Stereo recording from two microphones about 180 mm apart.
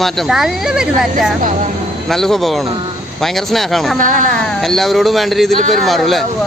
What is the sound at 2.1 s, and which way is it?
Speech, centre (ahead or behind).